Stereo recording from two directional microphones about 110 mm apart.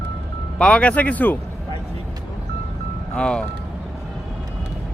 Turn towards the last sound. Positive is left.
turn(degrees=10)  # may be behind; listen again after turning